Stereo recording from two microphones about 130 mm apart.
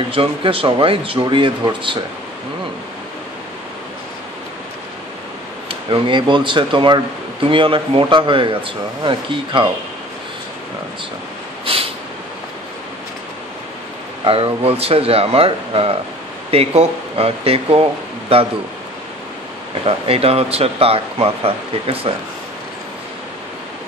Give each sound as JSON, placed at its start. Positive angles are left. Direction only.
{"t": 0.1, "sound": "speech", "side_deg": -45}
{"t": 5.7, "sound": "speech", "side_deg": -40}
{"t": 11.6, "sound": "a sound", "side_deg": -45}
{"t": 14.2, "sound": "speech", "side_deg": -45}
{"t": 20.1, "sound": "speech", "side_deg": -50}